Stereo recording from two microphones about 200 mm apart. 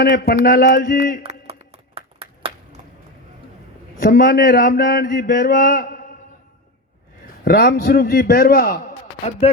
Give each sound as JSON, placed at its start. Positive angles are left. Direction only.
{"t": 0.0, "sound": "mantra", "side_deg": 50}
{"t": 1.2, "sound": "a sound", "side_deg": -30}
{"t": 4.1, "sound": "mantra", "side_deg": 45}
{"t": 7.4, "sound": "mantra", "side_deg": 55}